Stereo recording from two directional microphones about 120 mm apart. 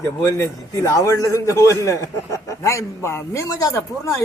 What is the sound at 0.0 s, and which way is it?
A man's voice, 25° left (ahead or behind).